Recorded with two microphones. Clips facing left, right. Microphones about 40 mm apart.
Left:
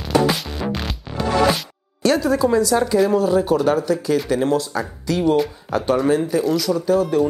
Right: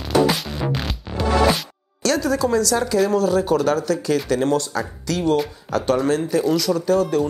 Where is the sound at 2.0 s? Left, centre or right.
Centre.